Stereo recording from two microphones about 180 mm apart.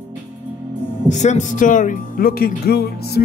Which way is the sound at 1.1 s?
40° left (ahead or behind).